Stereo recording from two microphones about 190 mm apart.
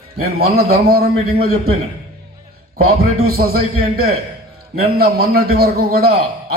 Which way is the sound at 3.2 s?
55° right (ahead or behind).